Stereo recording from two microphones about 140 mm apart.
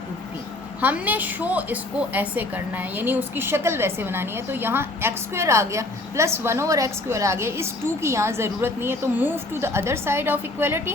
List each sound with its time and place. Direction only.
0.8 s a woman's voice: 10° right (ahead or behind)